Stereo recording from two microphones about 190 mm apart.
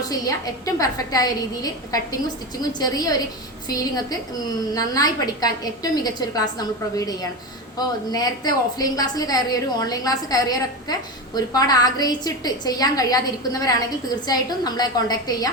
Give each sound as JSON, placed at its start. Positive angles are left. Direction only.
{"t": 0.1, "sound": "a woman's voice", "side_deg": 20}